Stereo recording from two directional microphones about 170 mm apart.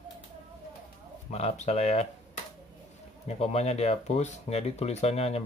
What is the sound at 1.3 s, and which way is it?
Speech, 40° left (ahead or behind).